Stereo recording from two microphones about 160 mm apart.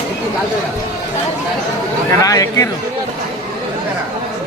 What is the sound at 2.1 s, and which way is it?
Speech, 20° left (ahead or behind).